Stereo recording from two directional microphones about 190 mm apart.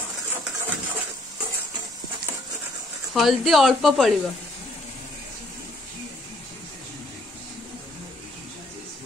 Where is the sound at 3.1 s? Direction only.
Centre (ahead or behind).